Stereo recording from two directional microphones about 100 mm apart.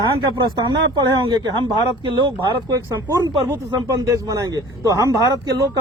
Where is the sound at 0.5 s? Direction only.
45° right (ahead or behind).